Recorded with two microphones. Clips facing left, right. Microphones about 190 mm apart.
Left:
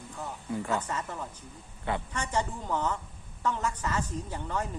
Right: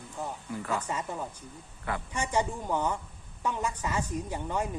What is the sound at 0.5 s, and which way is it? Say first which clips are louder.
Speech: left 3 dB; 25° left (ahead or behind).